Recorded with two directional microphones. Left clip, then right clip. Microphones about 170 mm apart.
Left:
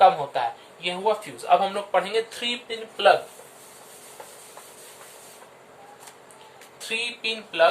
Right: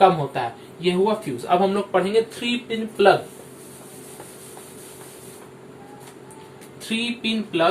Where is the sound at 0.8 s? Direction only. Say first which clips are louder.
Right 4 dB; 25° left (ahead or behind).